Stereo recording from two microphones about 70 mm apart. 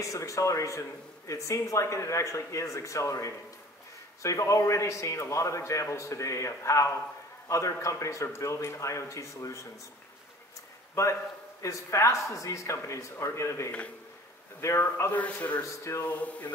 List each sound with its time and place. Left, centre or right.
0.0 s a man's voice: left
11.0 s a man's voice: left
15.1 s speech: left
15.8 s a man's voice: left
16.1 s speech: left